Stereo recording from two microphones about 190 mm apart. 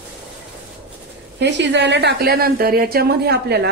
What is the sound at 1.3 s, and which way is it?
A woman's voice, 65° right (ahead or behind).